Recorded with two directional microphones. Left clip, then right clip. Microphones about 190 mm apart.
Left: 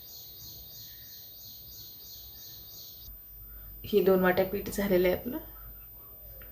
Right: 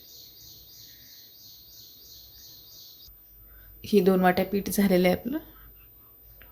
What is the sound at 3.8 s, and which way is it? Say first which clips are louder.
Speech: right 3 dB; 50° right (ahead or behind).